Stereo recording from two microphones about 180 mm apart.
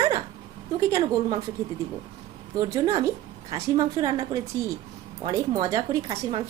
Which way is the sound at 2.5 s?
20° right (ahead or behind).